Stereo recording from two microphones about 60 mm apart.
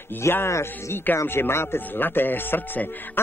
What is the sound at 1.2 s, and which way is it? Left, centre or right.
Speech, left.